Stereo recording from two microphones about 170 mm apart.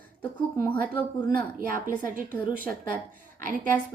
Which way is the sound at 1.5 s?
55° right (ahead or behind).